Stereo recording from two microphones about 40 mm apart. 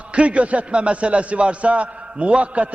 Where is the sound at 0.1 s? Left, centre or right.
Right.